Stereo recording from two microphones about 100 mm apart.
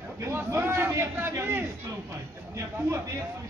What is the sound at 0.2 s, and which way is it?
A man's voice, 25° right (ahead or behind).